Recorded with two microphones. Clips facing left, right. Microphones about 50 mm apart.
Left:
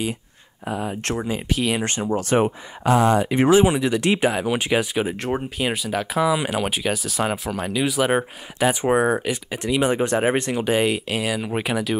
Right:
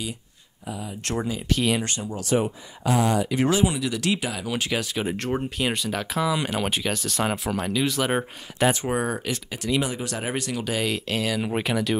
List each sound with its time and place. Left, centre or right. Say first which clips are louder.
0.7 s speech: left 7 dB; left
1.5 s speech: even; centre
1.9 s speech: left 4 dB; left
4.6 s speech: left 5 dB; left
5.0 s speech: left 2 dB; centre
8.8 s speech: left 7 dB; left
9.8 s speech: left 10 dB; left
11.1 s speech: left 1 dB; centre